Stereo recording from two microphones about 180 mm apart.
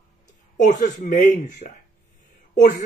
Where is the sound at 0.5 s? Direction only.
45° left (ahead or behind).